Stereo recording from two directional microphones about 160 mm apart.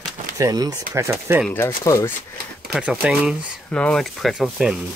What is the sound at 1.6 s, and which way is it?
Speech, 15° left (ahead or behind).